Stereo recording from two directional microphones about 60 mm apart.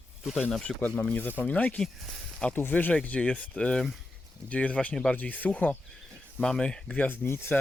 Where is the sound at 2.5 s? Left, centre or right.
Left.